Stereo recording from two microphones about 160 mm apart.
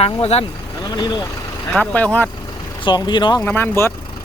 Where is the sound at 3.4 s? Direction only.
10° left (ahead or behind).